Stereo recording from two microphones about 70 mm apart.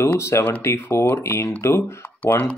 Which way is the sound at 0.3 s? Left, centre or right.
Left.